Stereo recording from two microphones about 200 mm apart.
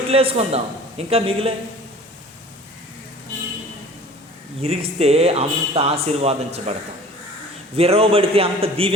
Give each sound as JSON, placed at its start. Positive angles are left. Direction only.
{"t": 0.1, "sound": "a man's voice", "side_deg": -30}
{"t": 4.6, "sound": "speech", "side_deg": -30}
{"t": 7.8, "sound": "a man's voice", "side_deg": -30}